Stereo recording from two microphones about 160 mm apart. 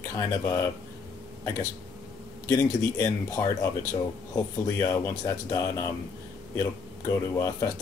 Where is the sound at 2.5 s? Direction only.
15° left (ahead or behind).